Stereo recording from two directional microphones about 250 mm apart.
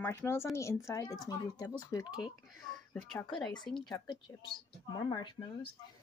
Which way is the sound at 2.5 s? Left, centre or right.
Centre.